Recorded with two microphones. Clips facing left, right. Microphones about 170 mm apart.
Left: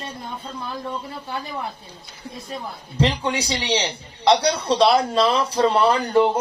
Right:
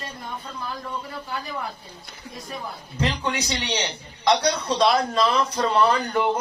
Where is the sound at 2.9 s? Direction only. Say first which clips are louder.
Left 4 dB; 30° left (ahead or behind).